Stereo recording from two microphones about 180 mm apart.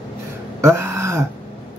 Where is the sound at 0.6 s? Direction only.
15° right (ahead or behind).